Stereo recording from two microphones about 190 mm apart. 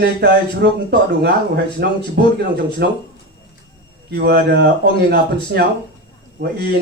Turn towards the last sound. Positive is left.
turn(degrees=-55)  # may be behind; listen again after turning